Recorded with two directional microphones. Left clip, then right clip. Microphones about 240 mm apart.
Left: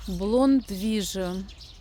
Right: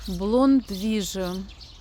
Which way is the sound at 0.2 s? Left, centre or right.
Centre.